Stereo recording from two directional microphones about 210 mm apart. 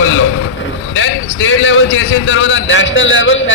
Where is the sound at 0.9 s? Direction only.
65° left (ahead or behind).